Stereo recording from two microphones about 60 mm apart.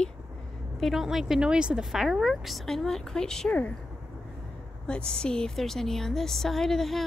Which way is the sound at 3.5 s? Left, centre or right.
Left.